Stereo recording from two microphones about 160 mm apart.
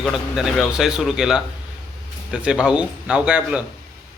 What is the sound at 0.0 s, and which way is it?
Speech, centre (ahead or behind).